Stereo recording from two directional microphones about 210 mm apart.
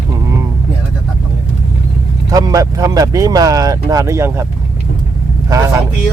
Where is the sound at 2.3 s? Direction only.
15° right (ahead or behind).